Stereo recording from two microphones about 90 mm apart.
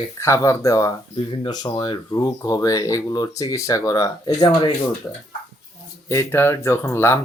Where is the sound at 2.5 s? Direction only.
40° left (ahead or behind).